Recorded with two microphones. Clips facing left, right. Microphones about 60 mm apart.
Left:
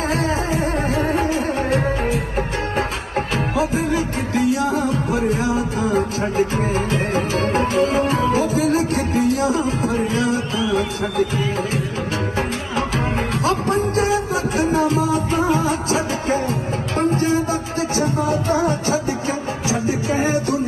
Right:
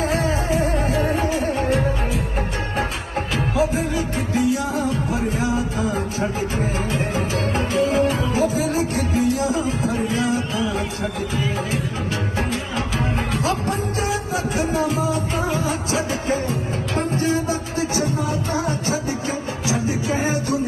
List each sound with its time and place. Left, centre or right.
0.9 s music: left
3.8 s music: left
7.8 s tabla: left
9.0 s music: left
13.4 s music: left
14.1 s music: left
15.4 s music: left
17.2 s music: left
18.3 s music: left
20.1 s music: left